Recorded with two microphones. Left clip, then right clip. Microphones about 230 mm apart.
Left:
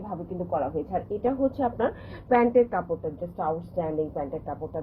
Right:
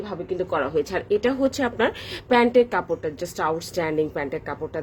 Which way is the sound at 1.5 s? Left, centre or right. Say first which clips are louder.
Right 4 dB; right.